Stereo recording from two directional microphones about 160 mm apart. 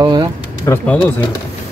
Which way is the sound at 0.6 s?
15° left (ahead or behind).